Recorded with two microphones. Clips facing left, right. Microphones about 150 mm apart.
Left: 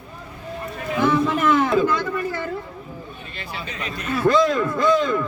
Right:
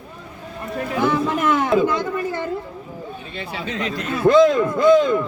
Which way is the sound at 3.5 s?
90° right.